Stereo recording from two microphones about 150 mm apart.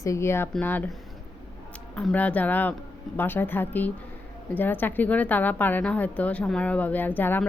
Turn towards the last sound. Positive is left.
turn(degrees=10)  # may be behind; listen again after turning